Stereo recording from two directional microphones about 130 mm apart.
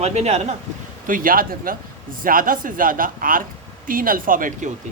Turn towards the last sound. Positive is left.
turn(degrees=-90)